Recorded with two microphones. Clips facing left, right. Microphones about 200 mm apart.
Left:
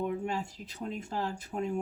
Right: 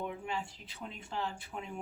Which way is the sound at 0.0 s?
40° left (ahead or behind).